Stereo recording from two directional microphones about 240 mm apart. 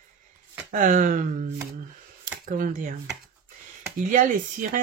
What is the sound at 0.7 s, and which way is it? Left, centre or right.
Speech, right.